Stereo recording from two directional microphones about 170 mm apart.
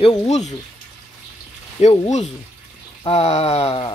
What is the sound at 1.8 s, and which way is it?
Speech, 40° left (ahead or behind).